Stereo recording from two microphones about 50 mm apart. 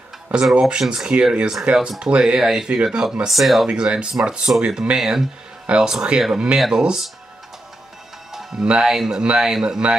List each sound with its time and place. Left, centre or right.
0.6 s speech: centre
3.3 s speech: centre
3.6 s speech: centre
8.3 s music: centre
8.8 s speech: centre